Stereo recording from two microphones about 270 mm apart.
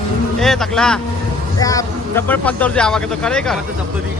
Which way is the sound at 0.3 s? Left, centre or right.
Centre.